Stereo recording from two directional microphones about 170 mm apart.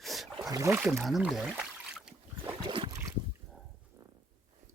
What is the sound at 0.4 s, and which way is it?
Speech, 20° right (ahead or behind).